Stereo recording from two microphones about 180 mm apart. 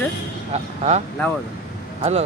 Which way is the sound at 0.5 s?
40° right (ahead or behind).